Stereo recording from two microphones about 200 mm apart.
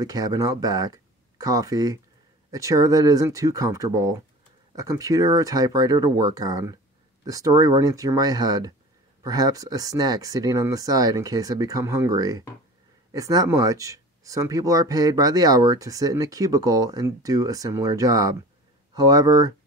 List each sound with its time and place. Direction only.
0.0 s speech: 20° right (ahead or behind)